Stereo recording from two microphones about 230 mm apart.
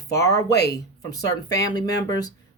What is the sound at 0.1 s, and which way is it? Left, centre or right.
Speech, centre.